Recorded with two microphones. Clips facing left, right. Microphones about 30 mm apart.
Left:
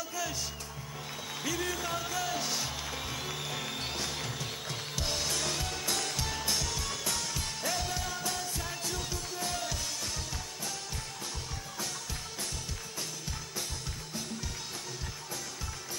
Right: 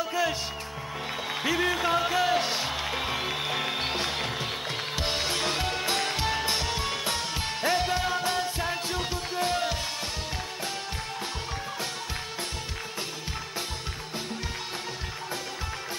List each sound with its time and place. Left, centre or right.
0.0 s music: right
1.4 s music: right